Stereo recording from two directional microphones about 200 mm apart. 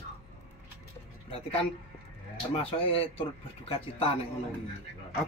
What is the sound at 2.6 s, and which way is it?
Speech, 30° left (ahead or behind).